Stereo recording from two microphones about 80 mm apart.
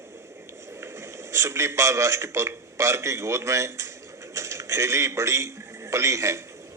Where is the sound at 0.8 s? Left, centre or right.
Right.